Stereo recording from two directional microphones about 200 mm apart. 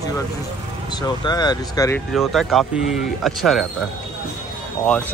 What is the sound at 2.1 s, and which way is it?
Speech, centre (ahead or behind).